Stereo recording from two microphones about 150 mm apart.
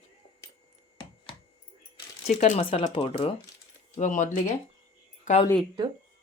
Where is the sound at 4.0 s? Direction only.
55° left (ahead or behind).